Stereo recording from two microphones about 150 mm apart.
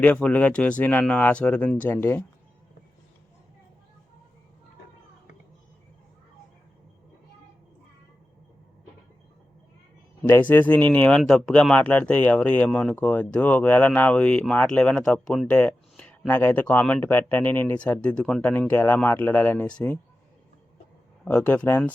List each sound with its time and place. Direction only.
0.0 s speech: 10° left (ahead or behind)
10.2 s speech: 15° left (ahead or behind)
21.2 s speech: 10° left (ahead or behind)